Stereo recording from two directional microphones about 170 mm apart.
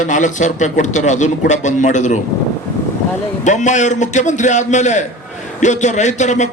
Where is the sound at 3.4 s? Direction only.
45° left (ahead or behind).